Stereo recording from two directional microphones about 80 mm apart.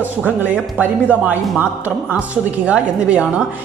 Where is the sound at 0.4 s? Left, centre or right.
Right.